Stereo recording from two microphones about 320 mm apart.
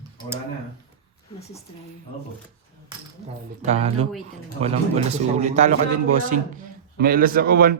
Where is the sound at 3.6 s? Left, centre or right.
Right.